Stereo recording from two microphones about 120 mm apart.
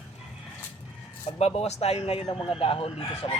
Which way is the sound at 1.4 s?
60° left (ahead or behind).